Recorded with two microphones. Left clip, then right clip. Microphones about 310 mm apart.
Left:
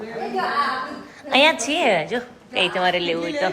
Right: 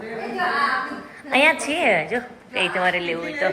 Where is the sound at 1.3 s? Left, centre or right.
Centre.